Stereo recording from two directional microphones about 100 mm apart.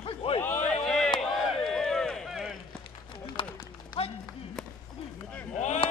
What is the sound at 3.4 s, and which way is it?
Run, 60° left (ahead or behind).